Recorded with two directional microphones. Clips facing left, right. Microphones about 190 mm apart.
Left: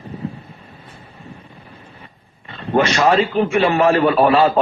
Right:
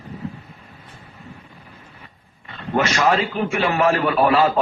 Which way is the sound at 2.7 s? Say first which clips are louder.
Left 4 dB; 30° left (ahead or behind).